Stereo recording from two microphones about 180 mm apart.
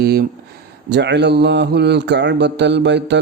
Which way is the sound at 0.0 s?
60° right (ahead or behind).